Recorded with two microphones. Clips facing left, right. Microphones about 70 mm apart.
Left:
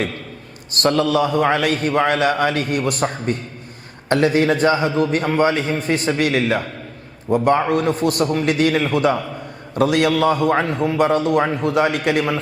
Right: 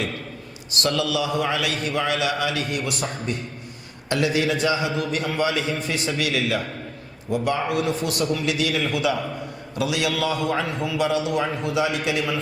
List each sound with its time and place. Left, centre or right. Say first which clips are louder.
0.7 s a man's voice: left 6 dB; left